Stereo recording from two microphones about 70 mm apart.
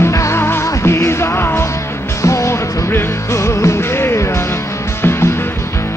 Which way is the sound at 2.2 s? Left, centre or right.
Left.